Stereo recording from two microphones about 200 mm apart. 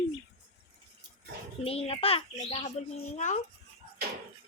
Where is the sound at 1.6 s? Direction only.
30° left (ahead or behind).